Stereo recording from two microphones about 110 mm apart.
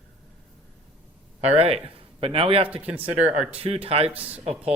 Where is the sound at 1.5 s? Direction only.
65° right (ahead or behind).